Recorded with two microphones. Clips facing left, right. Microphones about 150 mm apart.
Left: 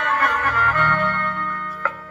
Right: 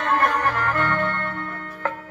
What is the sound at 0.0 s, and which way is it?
Music, 35° right (ahead or behind).